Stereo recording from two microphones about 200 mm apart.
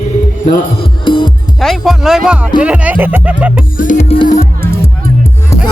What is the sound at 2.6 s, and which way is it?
Speech, 5° right (ahead or behind).